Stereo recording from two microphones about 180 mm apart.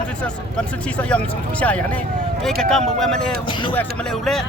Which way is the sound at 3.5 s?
25° left (ahead or behind).